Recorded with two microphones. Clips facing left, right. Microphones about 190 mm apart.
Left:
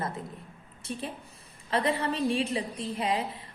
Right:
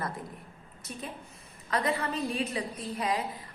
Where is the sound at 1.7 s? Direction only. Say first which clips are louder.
Left 2 dB; 30° left (ahead or behind).